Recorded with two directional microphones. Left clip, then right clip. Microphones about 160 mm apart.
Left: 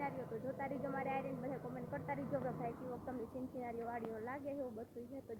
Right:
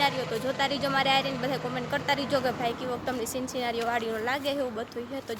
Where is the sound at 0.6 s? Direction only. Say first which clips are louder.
Right 17 dB; 40° right (ahead or behind).